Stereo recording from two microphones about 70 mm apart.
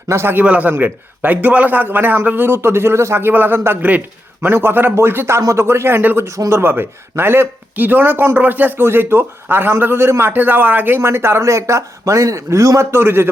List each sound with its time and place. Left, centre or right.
0.1 s speech: right
0.3 s a man's voice: right
6.2 s speech: right
6.6 s speech: right